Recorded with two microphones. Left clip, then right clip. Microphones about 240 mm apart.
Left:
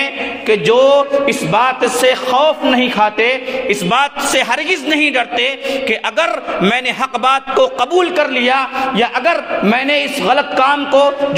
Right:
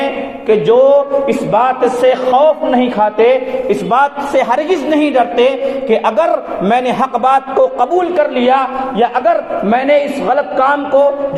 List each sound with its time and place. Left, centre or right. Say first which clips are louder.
0.0 s a man's voice: right 1 dB; left